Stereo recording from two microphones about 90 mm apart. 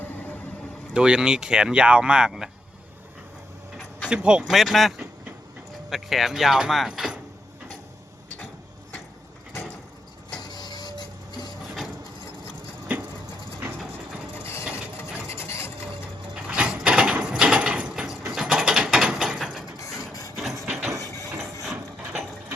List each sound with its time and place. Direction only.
0.0 s vehicle: 20° left (ahead or behind)
0.9 s speech: 10° right (ahead or behind)
4.1 s speech: 10° right (ahead or behind)
4.4 s speech: centre (ahead or behind)
10.5 s printer: 50° left (ahead or behind)
14.3 s mechanisms: 25° left (ahead or behind)
15.3 s filing: 30° left (ahead or behind)
16.3 s a sound: 10° right (ahead or behind)
18.3 s mechanisms: 5° right (ahead or behind)
19.8 s wood: 40° left (ahead or behind)
20.3 s hammer: centre (ahead or behind)
21.6 s a sound: 5° right (ahead or behind)